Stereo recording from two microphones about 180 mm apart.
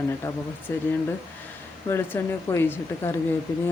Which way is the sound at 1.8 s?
15° left (ahead or behind).